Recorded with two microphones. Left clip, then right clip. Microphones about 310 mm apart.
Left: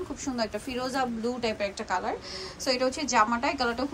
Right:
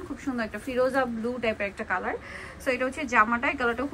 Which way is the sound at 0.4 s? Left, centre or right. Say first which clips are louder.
Right 5 dB; centre.